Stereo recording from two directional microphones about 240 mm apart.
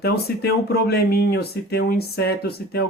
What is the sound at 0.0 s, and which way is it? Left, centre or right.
Speech, left.